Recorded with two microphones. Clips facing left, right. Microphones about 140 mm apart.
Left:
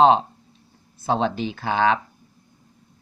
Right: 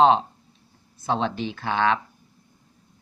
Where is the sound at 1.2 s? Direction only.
5° left (ahead or behind).